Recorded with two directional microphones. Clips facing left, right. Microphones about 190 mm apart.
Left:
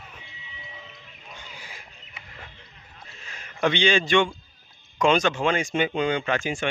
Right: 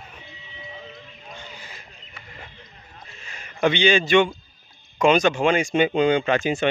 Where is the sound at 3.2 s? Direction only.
Centre (ahead or behind).